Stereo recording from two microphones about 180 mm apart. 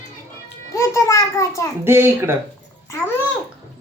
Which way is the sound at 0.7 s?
15° left (ahead or behind).